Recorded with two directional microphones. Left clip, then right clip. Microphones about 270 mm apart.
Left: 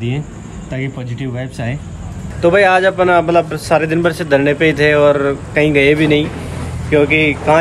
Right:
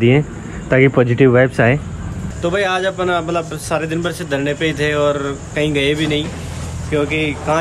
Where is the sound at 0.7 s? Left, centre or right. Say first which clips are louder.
Right 13 dB; left.